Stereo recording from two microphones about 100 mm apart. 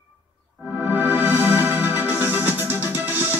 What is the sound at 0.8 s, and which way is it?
Music, 20° right (ahead or behind).